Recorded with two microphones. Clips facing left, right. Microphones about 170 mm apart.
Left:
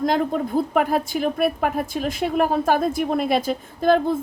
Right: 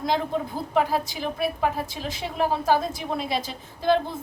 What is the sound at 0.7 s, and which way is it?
A woman's voice, 55° left (ahead or behind).